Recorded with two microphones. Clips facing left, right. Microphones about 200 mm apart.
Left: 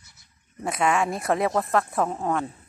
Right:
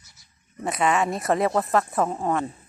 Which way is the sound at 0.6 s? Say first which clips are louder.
Right 1 dB; centre (ahead or behind).